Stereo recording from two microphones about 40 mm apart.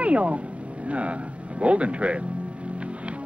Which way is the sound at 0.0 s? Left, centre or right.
Right.